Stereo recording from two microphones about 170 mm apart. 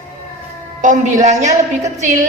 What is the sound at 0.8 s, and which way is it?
Speech, 45° right (ahead or behind).